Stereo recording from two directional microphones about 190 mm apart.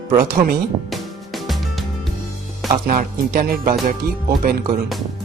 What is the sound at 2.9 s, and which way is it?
Speech, 50° right (ahead or behind).